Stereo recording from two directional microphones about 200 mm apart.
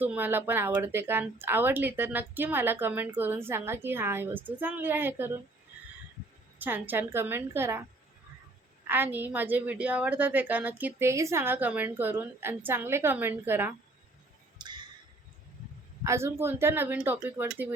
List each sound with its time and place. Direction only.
0.0 s speech: 10° right (ahead or behind)
6.6 s speech: 10° right (ahead or behind)
8.9 s speech: 10° right (ahead or behind)
14.6 s a sound: 20° right (ahead or behind)
16.0 s speech: 15° right (ahead or behind)